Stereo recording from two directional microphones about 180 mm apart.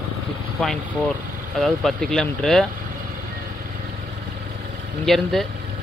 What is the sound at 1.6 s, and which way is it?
Speech, centre (ahead or behind).